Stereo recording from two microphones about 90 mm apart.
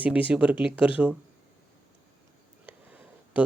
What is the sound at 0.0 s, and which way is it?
Speech, 15° right (ahead or behind).